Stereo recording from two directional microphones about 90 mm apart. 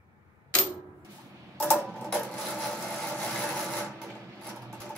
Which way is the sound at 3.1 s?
15° left (ahead or behind).